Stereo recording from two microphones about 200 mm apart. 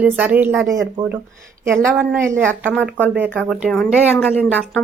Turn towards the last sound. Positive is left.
turn(degrees=10)  # may be behind; listen again after turning